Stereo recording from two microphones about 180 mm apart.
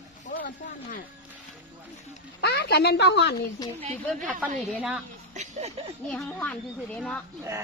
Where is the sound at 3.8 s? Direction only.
35° right (ahead or behind).